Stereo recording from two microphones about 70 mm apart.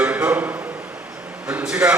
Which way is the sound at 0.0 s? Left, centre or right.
Centre.